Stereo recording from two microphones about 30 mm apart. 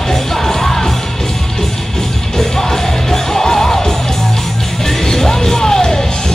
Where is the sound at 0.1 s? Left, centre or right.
Centre.